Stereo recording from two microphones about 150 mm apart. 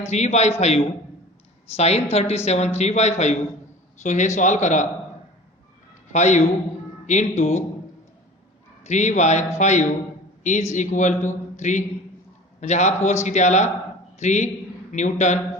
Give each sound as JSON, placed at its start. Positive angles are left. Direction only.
{"t": 0.1, "sound": "a man's voice", "side_deg": 50}
{"t": 1.7, "sound": "a man's voice", "side_deg": 45}
{"t": 6.1, "sound": "a man's voice", "side_deg": 50}
{"t": 8.8, "sound": "a man's voice", "side_deg": 50}